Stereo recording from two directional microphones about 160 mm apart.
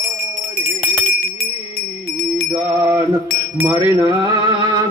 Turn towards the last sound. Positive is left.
turn(degrees=-20)  # may be behind; listen again after turning